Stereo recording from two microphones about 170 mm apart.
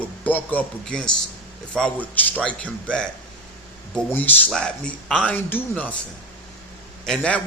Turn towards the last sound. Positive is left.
turn(degrees=5)  # may be behind; listen again after turning